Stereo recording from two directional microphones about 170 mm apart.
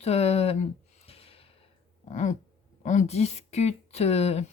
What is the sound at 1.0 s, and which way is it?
Snort, 35° left (ahead or behind).